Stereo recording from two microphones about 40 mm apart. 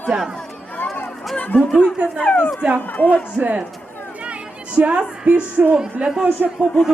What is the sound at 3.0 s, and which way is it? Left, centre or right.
Speech, left.